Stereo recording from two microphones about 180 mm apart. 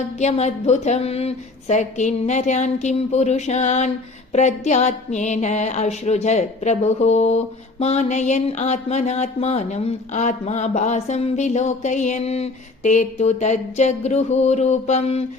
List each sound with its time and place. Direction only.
0.2 s speech: 40° left (ahead or behind)